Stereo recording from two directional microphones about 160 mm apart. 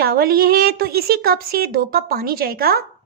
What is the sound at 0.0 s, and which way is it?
A woman's voice, 70° right (ahead or behind).